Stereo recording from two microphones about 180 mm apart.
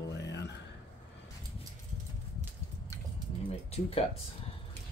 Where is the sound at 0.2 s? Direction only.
75° left (ahead or behind).